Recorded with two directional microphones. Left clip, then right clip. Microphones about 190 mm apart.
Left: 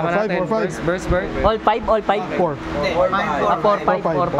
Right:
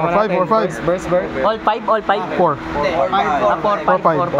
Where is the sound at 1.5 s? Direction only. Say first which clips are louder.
Even; 45° left (ahead or behind).